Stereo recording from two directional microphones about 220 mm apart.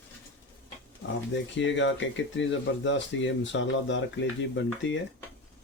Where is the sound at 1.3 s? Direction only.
55° left (ahead or behind).